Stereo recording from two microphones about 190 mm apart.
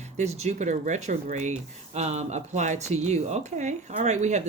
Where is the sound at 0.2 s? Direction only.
35° right (ahead or behind).